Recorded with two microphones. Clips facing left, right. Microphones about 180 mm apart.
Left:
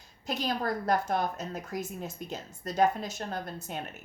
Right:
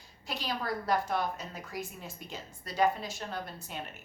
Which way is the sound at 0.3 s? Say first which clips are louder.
Left 4 dB; 45° left (ahead or behind).